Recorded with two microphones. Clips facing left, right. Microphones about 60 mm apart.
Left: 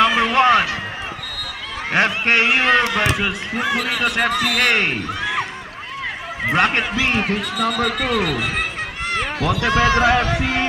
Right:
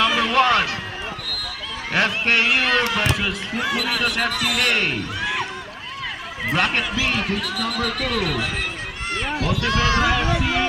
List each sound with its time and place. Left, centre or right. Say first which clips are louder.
0.0 s a sound: left 3 dB; left
1.9 s speech: left 3 dB; left
6.4 s speech: left 4 dB; left
9.5 s speech: left 5 dB; centre
9.7 s speech: left 5 dB; left